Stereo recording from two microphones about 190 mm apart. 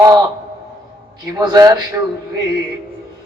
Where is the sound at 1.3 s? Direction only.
20° right (ahead or behind).